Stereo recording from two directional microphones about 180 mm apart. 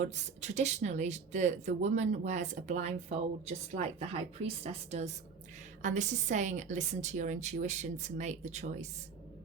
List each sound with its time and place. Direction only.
0.2 s speech: 40° right (ahead or behind)